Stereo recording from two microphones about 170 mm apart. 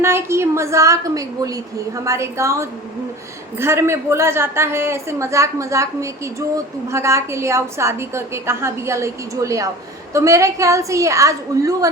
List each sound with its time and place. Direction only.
0.0 s a woman's voice: 15° right (ahead or behind)